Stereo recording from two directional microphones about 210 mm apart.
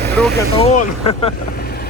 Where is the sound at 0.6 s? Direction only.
25° left (ahead or behind).